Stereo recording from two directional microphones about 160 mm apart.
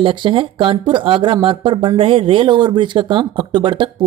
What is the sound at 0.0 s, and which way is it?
Speech, 30° right (ahead or behind).